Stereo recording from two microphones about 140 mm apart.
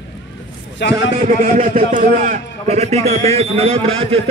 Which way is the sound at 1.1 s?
70° right (ahead or behind).